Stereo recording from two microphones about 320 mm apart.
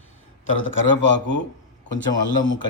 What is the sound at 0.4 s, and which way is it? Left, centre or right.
Speech, left.